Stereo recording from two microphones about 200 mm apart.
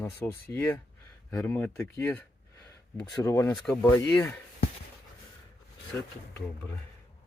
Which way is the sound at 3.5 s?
5° left (ahead or behind).